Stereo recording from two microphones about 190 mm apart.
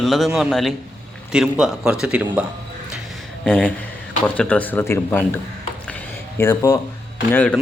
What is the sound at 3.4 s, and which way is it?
Speech, 5° left (ahead or behind).